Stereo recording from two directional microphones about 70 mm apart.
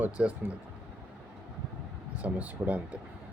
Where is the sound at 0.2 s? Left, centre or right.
Centre.